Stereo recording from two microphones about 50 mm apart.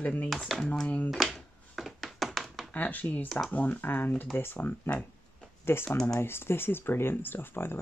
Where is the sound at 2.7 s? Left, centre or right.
Left.